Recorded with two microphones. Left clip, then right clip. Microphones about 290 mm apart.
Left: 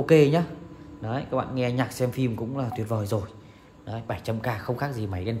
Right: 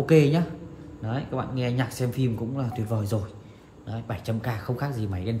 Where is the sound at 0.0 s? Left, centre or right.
Left.